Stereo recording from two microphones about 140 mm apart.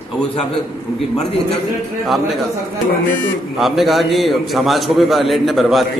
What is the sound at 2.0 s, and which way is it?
Speech, centre (ahead or behind).